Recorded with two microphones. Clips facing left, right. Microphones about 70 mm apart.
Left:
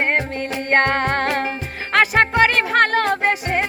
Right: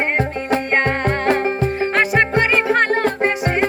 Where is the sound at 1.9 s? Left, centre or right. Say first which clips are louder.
Left 3 dB; left.